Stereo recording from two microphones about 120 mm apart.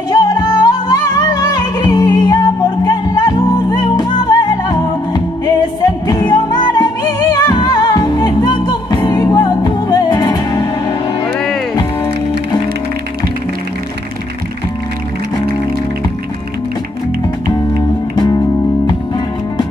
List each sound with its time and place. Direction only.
0.1 s music: 30° left (ahead or behind)
17.5 s music: 35° left (ahead or behind)